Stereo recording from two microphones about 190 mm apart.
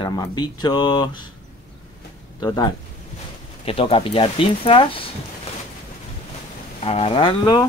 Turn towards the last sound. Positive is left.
turn(degrees=25)  # may be behind; listen again after turning